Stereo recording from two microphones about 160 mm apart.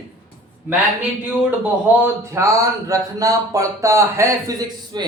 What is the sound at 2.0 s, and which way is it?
A man's voice, 15° right (ahead or behind).